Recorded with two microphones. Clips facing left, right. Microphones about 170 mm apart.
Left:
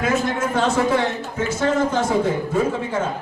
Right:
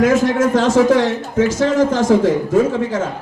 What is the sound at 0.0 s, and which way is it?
A man's voice, 90° right.